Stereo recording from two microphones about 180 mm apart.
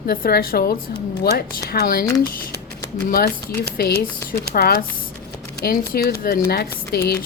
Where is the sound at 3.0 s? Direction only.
55° left (ahead or behind).